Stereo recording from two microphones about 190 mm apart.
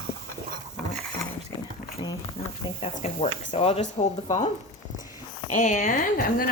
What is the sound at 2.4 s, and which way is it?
Speech, 35° left (ahead or behind).